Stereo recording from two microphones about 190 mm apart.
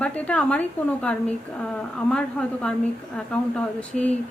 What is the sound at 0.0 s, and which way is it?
A woman's voice, 5° left (ahead or behind).